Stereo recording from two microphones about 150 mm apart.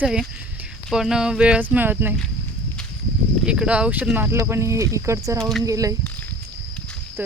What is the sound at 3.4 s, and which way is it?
Speech, 5° right (ahead or behind).